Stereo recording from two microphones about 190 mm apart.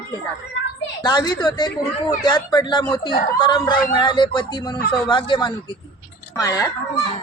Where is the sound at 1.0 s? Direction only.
20° left (ahead or behind).